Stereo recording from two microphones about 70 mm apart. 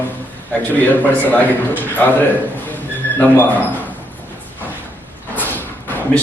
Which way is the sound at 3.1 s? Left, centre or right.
Left.